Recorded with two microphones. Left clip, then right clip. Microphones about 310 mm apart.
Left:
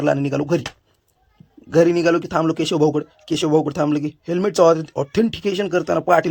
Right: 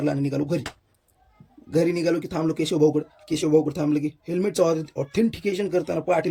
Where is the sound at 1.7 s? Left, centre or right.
Centre.